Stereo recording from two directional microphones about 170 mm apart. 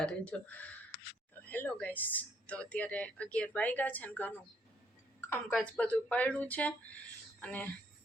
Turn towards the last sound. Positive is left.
turn(degrees=10)  # may be behind; listen again after turning